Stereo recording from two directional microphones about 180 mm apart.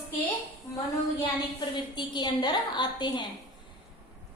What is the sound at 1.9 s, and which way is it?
A woman's voice, 25° left (ahead or behind).